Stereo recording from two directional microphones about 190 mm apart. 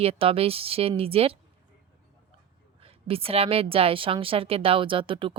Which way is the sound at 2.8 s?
30° right (ahead or behind).